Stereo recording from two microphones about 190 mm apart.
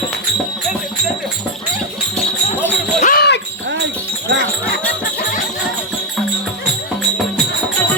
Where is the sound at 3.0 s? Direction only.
50° left (ahead or behind).